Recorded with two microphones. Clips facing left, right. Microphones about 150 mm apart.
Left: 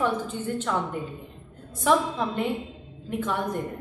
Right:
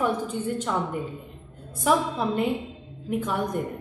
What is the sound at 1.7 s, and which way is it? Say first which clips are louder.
A woman's voice: even; 10° right (ahead or behind).